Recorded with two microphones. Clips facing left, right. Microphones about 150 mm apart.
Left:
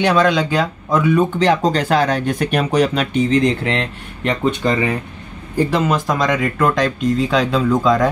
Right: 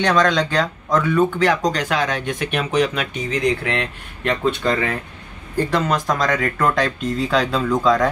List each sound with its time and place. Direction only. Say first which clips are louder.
0.0 s speech: left 2 dB; 10° left (ahead or behind)
1.4 s speech: left 3 dB; 25° left (ahead or behind)
5.7 s speech: even; 5° left (ahead or behind)